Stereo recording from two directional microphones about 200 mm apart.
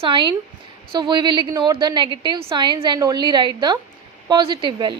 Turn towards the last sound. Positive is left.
turn(degrees=-25)  # may be behind; listen again after turning